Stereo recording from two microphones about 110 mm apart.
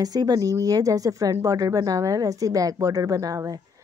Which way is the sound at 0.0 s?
35° right (ahead or behind).